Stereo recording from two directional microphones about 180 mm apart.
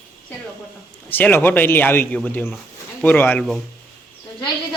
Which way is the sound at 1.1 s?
10° left (ahead or behind).